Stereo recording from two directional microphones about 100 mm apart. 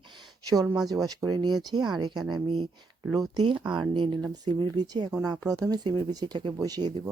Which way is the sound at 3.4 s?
50° right (ahead or behind).